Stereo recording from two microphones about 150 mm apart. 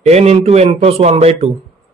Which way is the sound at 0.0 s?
45° right (ahead or behind).